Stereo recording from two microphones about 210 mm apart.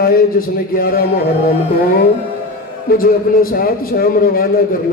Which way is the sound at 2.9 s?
45° left (ahead or behind).